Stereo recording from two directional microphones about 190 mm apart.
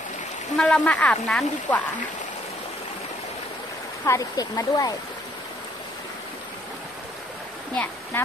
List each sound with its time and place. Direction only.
0.6 s speech: 5° left (ahead or behind)
4.0 s speech: 15° left (ahead or behind)
7.7 s speech: 10° left (ahead or behind)